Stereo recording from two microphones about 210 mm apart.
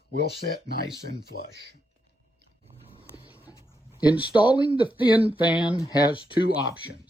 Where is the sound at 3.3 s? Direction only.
10° right (ahead or behind).